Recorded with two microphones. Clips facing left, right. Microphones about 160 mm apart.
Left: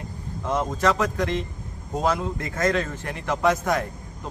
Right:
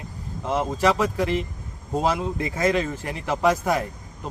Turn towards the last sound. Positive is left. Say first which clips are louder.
# right 1 dB
turn(degrees=-10)  # may be behind; listen again after turning